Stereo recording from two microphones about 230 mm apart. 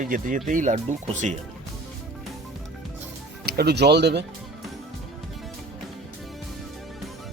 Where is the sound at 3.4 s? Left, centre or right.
Right.